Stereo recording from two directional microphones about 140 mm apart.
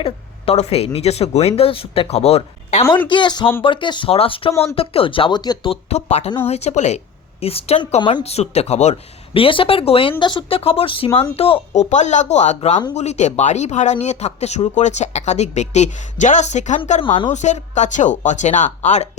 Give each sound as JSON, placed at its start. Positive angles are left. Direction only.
{"t": 0.0, "sound": "a woman's voice", "side_deg": 50}
{"t": 3.1, "sound": "speech", "side_deg": 35}
{"t": 5.7, "sound": "speech", "side_deg": 50}
{"t": 17.0, "sound": "speech", "side_deg": 35}
{"t": 17.3, "sound": "speech", "side_deg": 60}